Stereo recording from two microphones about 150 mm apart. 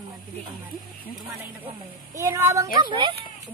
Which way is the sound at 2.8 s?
35° right (ahead or behind).